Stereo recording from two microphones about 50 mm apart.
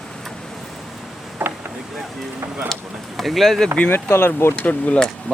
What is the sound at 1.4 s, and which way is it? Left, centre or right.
Boat, right.